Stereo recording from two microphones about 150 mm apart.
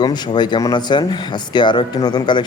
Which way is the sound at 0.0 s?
30° left (ahead or behind).